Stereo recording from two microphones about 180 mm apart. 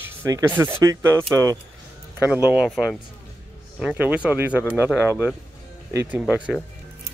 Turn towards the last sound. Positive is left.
turn(degrees=-5)  # may be behind; listen again after turning